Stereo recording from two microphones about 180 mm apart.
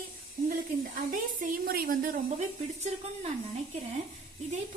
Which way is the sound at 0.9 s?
50° right (ahead or behind).